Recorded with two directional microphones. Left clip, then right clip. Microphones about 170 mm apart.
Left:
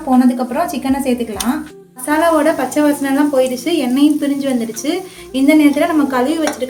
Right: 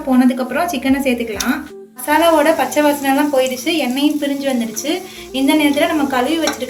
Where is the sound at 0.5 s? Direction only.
75° left (ahead or behind).